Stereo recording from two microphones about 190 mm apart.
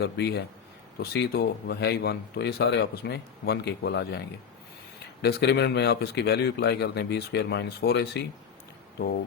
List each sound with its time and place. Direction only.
0.0 s speech: 60° left (ahead or behind)
5.2 s speech: 60° left (ahead or behind)